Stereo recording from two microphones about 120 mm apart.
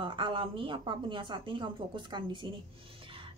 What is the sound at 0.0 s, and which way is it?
A woman's voice, 45° right (ahead or behind).